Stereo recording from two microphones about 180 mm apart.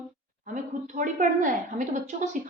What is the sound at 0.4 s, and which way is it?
A woman's voice, 45° right (ahead or behind).